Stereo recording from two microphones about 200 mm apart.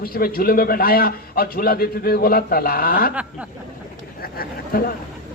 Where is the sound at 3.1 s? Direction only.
5° right (ahead or behind).